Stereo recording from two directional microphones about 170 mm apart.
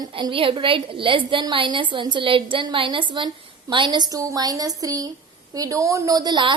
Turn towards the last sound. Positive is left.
turn(degrees=-25)  # may be behind; listen again after turning